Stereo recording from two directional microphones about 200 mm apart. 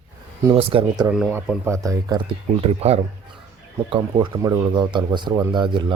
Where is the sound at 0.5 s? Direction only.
25° right (ahead or behind).